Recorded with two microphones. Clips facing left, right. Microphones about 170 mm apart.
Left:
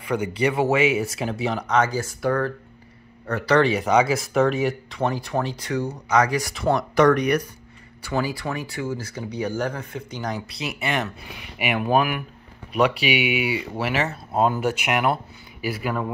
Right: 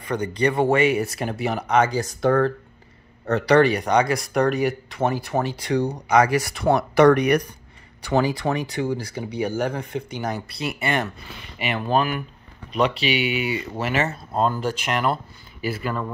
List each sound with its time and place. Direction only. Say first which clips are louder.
0.0 s speech: even; 10° left (ahead or behind)
2.0 s speech: right 3 dB; 20° right (ahead or behind)
3.3 s speech: right 3 dB; 15° right (ahead or behind)
3.6 s speech: even; 5° left (ahead or behind); by 6.3 s 10° right (ahead or behind)
6.4 s speech: right 2 dB; centre (ahead or behind)
7.2 s speech: right 2 dB; 60° right (ahead or behind)
8.1 s speech: right 5 dB; 20° right (ahead or behind)
10.2 s speech: left 1 dB; centre (ahead or behind)
11.5 s speech: left 1 dB; 10° left (ahead or behind)